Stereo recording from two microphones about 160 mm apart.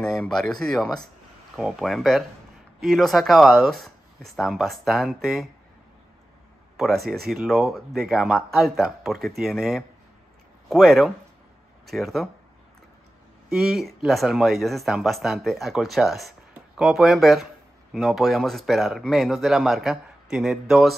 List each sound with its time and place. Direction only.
0.0 s speech: 5° left (ahead or behind)
7.2 s speech: centre (ahead or behind)
13.5 s speech: centre (ahead or behind)